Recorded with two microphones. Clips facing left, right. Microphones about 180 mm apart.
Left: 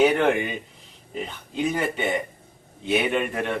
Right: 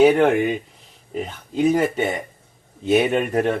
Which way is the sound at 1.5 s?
40° right (ahead or behind).